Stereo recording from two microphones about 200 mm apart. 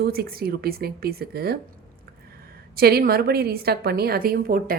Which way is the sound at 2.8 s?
50° right (ahead or behind).